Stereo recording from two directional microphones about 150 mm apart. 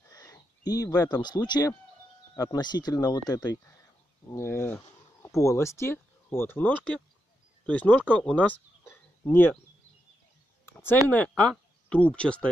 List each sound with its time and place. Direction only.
0.1 s speech: 25° left (ahead or behind)
10.6 s a sound: 15° left (ahead or behind)
11.1 s speech: 10° left (ahead or behind)